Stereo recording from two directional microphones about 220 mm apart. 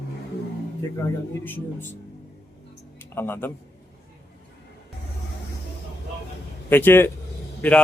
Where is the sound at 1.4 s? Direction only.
10° left (ahead or behind).